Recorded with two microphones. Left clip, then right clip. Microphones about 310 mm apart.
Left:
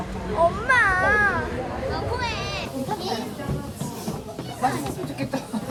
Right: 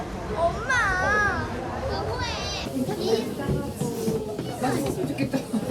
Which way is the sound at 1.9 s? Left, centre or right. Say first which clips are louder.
Left 2 dB; centre.